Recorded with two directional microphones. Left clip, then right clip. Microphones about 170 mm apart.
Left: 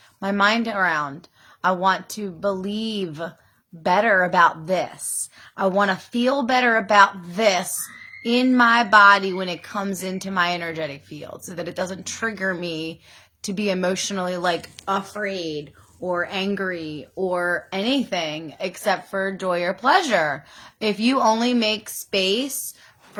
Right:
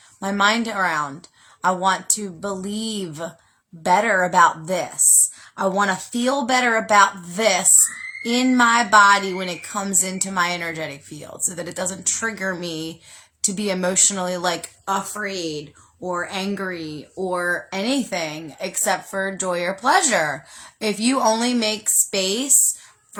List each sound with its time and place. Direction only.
0.2 s a woman's voice: 20° right (ahead or behind)